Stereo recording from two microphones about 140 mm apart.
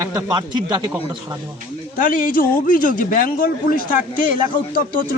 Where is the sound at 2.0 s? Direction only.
75° left (ahead or behind); by 3.9 s 90° left.